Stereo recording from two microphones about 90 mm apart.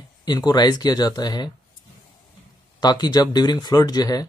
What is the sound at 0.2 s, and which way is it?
Speech, 50° left (ahead or behind).